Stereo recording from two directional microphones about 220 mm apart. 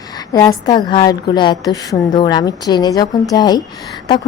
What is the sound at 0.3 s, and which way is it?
A woman's voice, 15° left (ahead or behind).